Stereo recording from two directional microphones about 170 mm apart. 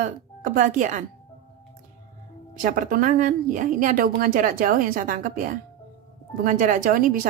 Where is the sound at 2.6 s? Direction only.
55° right (ahead or behind).